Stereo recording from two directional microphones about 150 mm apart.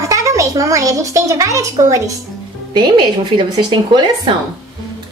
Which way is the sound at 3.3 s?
30° right (ahead or behind).